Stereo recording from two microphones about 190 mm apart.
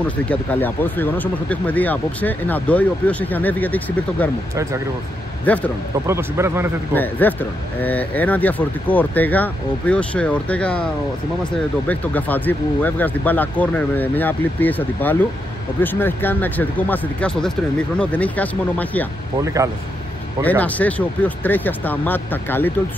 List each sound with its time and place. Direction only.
0.0 s speech: 5° left (ahead or behind)
5.4 s a man's voice: 10° left (ahead or behind)
6.0 s a man's voice: 15° right (ahead or behind)
6.9 s speech: 10° left (ahead or behind)
11.9 s speech: 10° left (ahead or behind)
19.4 s a man's voice: 15° right (ahead or behind)
20.4 s speech: 10° left (ahead or behind)